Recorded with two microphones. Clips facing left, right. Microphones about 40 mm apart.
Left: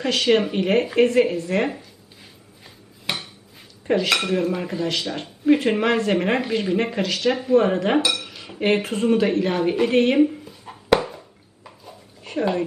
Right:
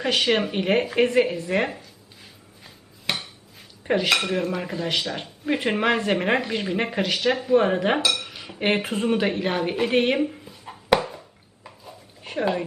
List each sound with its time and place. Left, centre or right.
0.0 s speech: centre
2.6 s dishes: centre
3.8 s speech: centre
4.1 s speech: centre
7.6 s speech: centre
7.9 s dishes: centre
8.3 s cutlery: centre
8.6 s speech: centre
10.2 s a sound: centre
12.2 s a sound: centre